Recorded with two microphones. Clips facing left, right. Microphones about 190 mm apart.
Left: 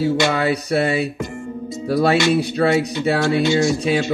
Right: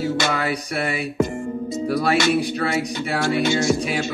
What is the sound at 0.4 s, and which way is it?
Speech, 25° left (ahead or behind).